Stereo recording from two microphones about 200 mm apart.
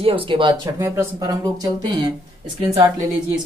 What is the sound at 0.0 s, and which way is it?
Speech, 25° right (ahead or behind).